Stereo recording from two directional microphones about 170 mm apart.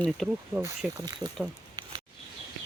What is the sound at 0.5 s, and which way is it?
Speech, 15° right (ahead or behind).